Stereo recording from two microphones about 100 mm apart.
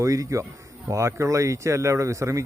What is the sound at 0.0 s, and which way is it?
Speech, 30° right (ahead or behind).